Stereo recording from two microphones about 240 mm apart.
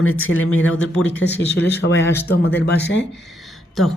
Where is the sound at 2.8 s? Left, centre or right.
Left.